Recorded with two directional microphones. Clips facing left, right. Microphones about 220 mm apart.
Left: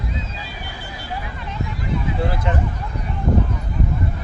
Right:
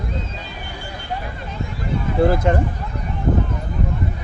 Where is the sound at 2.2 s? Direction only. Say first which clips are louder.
Right 7 dB; 45° right (ahead or behind).